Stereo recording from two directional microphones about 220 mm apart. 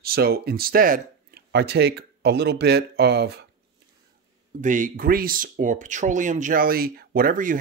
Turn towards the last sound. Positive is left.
turn(degrees=-40)  # may be behind; listen again after turning